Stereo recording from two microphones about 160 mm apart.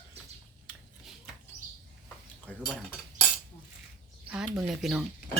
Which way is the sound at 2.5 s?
5° left (ahead or behind).